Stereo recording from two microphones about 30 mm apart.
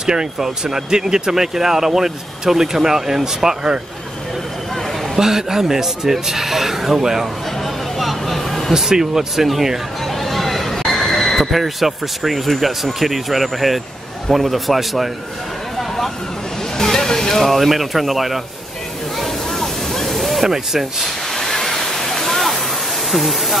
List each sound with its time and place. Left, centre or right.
0.0 s speech: right
5.1 s speech: centre
8.0 s vehicle: centre
8.7 s speech: centre
10.2 s chatter: centre
10.9 s a sound: centre
11.5 s speech: centre
16.7 s speech: centre
19.1 s a sound: centre
20.4 s speech: centre
21.4 s waterfall: centre
23.1 s speech: centre